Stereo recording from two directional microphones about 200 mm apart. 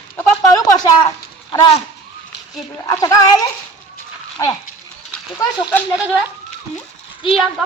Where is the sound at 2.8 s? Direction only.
15° left (ahead or behind).